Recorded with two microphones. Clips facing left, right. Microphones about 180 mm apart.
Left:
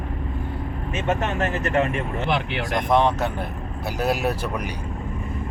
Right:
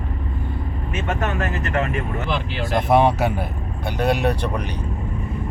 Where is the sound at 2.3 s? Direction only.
65° left (ahead or behind).